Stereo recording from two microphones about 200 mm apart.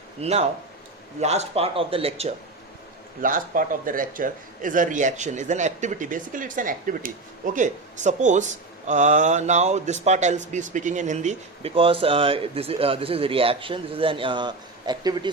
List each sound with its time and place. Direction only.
0.2 s a man's voice: 30° right (ahead or behind)
3.2 s a man's voice: 45° right (ahead or behind); by 15.3 s 20° right (ahead or behind)